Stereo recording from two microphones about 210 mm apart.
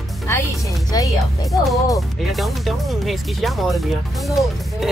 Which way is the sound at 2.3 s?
Centre (ahead or behind).